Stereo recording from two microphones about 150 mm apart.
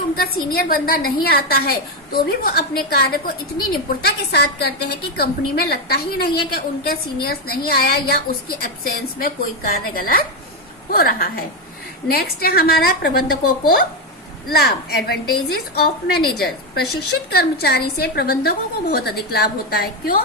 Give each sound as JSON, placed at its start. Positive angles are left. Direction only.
{"t": 0.2, "sound": "a woman's voice", "side_deg": 75}
{"t": 9.2, "sound": "a woman's voice", "side_deg": 80}
{"t": 10.9, "sound": "a woman's voice", "side_deg": 90}